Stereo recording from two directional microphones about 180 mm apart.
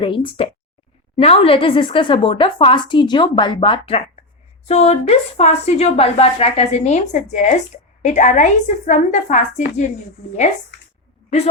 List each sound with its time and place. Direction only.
0.0 s a woman's voice: 30° left (ahead or behind)